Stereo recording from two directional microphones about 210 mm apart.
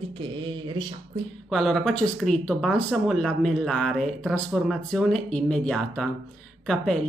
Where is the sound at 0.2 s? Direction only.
25° right (ahead or behind).